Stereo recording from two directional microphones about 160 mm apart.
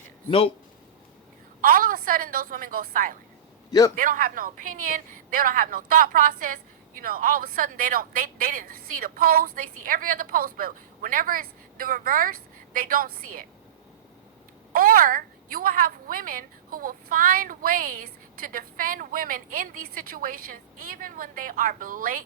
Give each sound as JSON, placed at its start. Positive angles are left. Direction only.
{"t": 1.6, "sound": "a woman's voice", "side_deg": -65}
{"t": 3.7, "sound": "a man's voice", "side_deg": 20}
{"t": 3.9, "sound": "a woman's voice", "side_deg": -60}
{"t": 14.7, "sound": "a woman's voice", "side_deg": -65}